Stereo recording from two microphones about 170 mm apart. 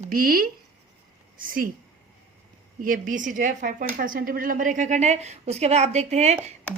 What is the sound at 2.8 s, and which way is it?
A woman's voice, 55° right (ahead or behind).